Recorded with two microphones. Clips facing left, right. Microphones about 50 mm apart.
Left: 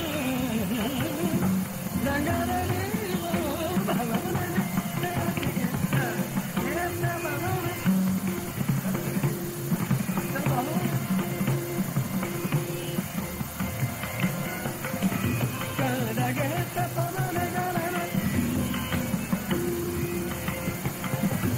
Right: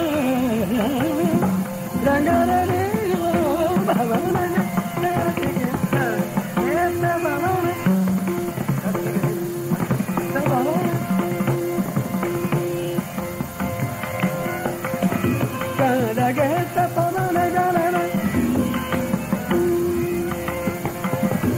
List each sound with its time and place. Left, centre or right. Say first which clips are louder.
0.0 s music: right 9 dB; right
9.8 s music: right 6 dB; right
15.0 s music: right 6 dB; right